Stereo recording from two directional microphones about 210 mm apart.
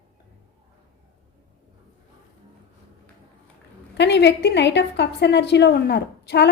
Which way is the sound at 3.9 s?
55° left (ahead or behind).